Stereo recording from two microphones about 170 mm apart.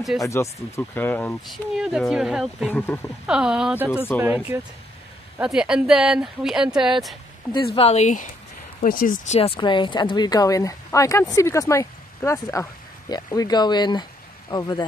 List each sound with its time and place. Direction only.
0.2 s speech: 15° left (ahead or behind)
1.4 s speech: centre (ahead or behind)
2.7 s speech: 10° left (ahead or behind)
3.3 s speech: 5° right (ahead or behind)
7.7 s speech: 35° left (ahead or behind)
9.4 s speech: 30° left (ahead or behind)